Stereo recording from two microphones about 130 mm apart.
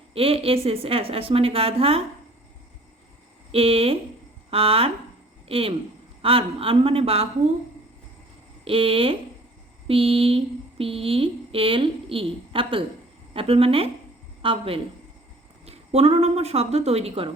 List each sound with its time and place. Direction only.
0.1 s speech: 45° right (ahead or behind)
3.5 s speech: 50° right (ahead or behind)
8.6 s speech: 45° right (ahead or behind)